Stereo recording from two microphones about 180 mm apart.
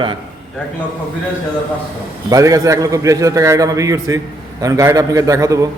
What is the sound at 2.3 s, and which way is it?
A man's voice, 20° right (ahead or behind).